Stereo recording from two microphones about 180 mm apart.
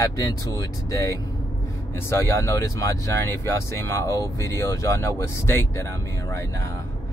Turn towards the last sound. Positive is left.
turn(degrees=15)  # may be behind; listen again after turning